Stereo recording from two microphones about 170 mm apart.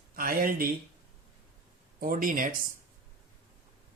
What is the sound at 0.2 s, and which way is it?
Speech, 55° right (ahead or behind).